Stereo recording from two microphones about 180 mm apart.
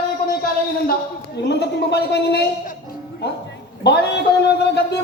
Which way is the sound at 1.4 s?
70° left (ahead or behind).